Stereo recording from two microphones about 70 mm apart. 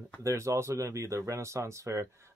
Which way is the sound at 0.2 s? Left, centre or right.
Right.